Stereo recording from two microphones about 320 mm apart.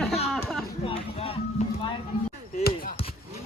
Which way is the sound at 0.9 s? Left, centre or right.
Centre.